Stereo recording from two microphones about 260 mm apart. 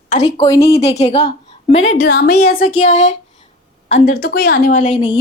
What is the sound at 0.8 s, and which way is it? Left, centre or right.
A woman's voice, left.